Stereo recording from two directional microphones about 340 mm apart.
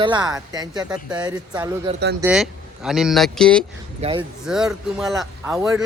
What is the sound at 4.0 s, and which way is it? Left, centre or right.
Speech, centre.